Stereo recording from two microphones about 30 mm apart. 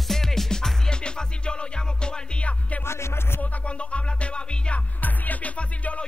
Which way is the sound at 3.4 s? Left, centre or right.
Left.